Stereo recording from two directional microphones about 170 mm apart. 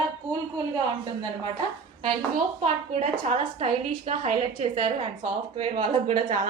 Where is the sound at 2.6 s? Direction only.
40° right (ahead or behind).